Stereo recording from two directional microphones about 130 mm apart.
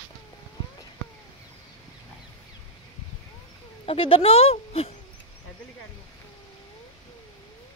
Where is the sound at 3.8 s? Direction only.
45° left (ahead or behind).